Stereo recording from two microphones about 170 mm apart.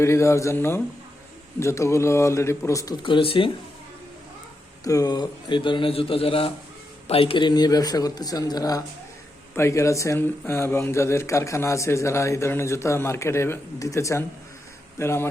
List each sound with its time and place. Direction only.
0.0 s speech: 15° left (ahead or behind); by 3.5 s 30° left (ahead or behind)
4.8 s a man's voice: 20° left (ahead or behind)